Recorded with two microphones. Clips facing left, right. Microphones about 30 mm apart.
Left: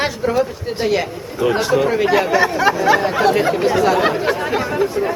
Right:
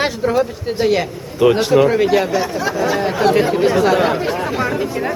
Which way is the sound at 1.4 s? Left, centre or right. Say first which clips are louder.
Right 5 dB; right.